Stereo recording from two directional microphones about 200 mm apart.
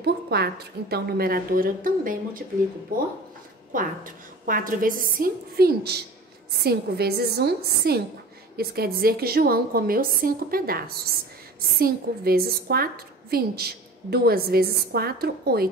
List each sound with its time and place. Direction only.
0.0 s a woman's voice: 55° right (ahead or behind)
3.7 s a woman's voice: 45° right (ahead or behind)
11.8 s a woman's voice: 50° right (ahead or behind)